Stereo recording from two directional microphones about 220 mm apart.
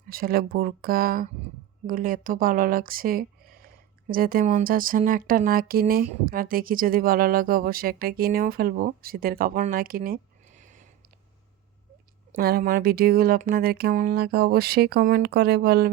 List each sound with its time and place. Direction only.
0.1 s speech: 40° right (ahead or behind)
12.4 s speech: 45° right (ahead or behind)